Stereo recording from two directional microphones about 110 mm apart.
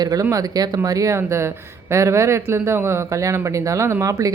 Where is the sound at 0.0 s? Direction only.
35° right (ahead or behind).